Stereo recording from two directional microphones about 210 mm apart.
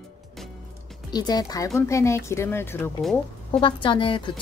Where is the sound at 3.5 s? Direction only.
25° left (ahead or behind).